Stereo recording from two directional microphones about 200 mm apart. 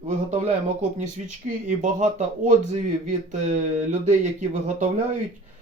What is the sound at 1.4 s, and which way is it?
Speech, 40° right (ahead or behind).